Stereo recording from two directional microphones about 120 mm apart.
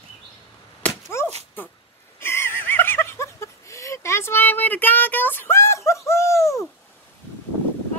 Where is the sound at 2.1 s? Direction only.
20° left (ahead or behind).